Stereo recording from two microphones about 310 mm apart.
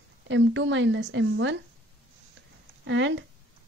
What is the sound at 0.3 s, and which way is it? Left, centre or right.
A woman's voice, right.